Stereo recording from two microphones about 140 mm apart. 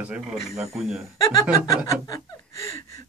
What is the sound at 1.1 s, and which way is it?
Speech, 25° left (ahead or behind).